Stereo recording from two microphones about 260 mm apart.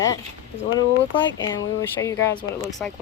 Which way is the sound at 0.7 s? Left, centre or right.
Centre.